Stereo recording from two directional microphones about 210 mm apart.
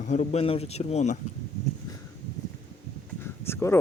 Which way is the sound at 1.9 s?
15° left (ahead or behind).